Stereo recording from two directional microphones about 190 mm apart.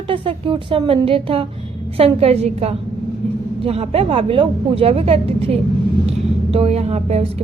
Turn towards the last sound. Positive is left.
turn(degrees=-35)  # may be behind; listen again after turning